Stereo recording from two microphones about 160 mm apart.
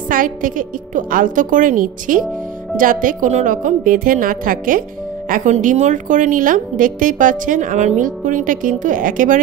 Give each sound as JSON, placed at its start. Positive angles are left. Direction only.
{"t": 0.1, "sound": "a woman's voice", "side_deg": -60}